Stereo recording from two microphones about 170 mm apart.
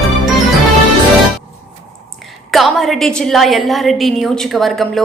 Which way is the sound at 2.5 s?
Centre (ahead or behind).